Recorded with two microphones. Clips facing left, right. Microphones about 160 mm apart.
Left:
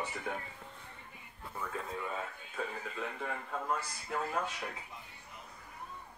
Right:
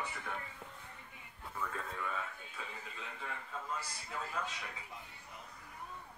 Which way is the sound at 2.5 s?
55° left (ahead or behind).